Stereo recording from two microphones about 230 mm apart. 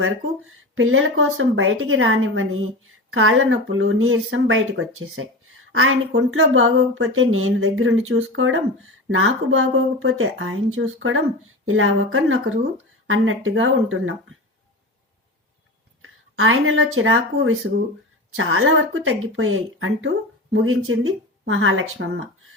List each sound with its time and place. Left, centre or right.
0.8 s speech: right
16.0 s speech: right